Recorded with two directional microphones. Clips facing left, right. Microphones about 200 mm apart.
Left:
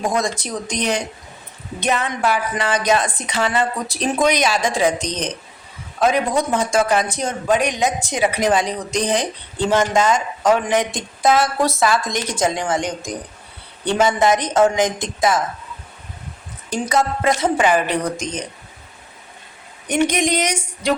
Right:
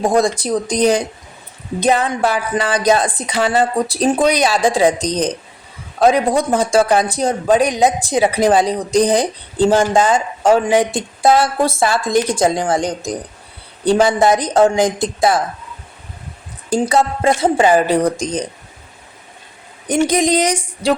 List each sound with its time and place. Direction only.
0.0 s speech: 30° right (ahead or behind)
16.8 s speech: 30° right (ahead or behind)
20.1 s speech: 35° right (ahead or behind)